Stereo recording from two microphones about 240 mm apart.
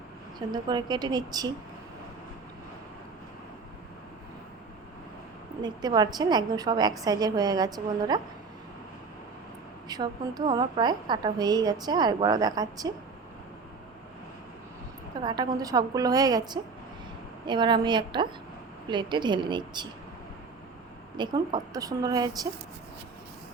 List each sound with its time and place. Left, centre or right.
0.3 s a woman's voice: centre
5.6 s a woman's voice: centre
9.9 s a woman's voice: centre
15.2 s a woman's voice: centre
21.2 s a woman's voice: centre